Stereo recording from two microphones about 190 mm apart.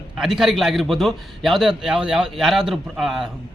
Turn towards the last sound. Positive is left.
turn(degrees=0)  # may be behind; listen again after turning